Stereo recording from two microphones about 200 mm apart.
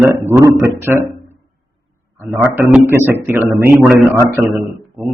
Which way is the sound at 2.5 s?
10° right (ahead or behind).